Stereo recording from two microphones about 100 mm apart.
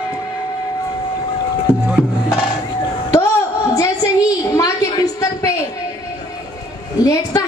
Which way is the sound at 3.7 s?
35° left (ahead or behind).